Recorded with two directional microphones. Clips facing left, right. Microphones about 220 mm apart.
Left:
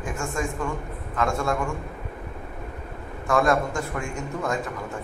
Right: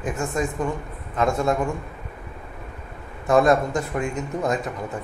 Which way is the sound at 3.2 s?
20° right (ahead or behind).